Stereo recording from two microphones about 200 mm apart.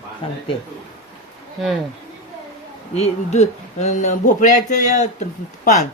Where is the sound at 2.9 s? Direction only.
35° left (ahead or behind).